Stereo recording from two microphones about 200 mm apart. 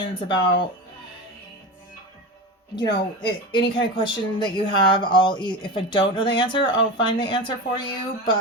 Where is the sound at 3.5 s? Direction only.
25° left (ahead or behind).